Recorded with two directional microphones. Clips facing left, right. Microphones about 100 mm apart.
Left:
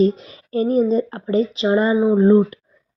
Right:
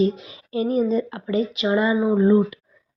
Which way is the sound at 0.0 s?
40° left (ahead or behind).